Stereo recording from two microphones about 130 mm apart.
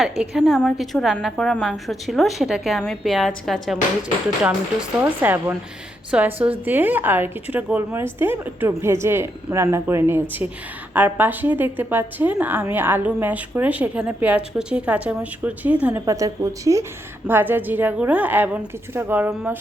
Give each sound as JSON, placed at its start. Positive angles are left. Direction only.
{"t": 0.0, "sound": "a woman's voice", "side_deg": -5}
{"t": 4.4, "sound": "a woman's voice", "side_deg": -10}
{"t": 16.0, "sound": "a woman's voice", "side_deg": -25}